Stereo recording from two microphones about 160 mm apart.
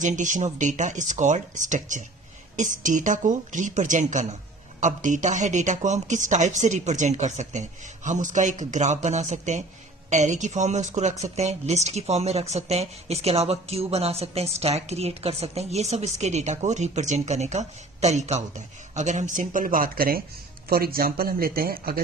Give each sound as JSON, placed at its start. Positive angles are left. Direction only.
{"t": 0.0, "sound": "speech", "side_deg": -50}